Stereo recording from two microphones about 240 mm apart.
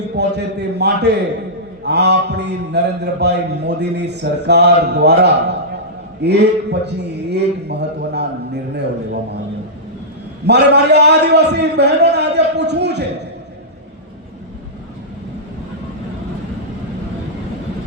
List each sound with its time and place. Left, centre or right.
0.2 s a man's voice: right
10.4 s a man's voice: right